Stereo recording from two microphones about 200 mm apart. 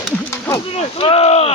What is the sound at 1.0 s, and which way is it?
Speech, 30° left (ahead or behind).